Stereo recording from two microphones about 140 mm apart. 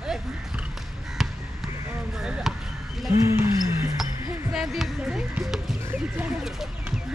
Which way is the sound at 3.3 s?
20° right (ahead or behind).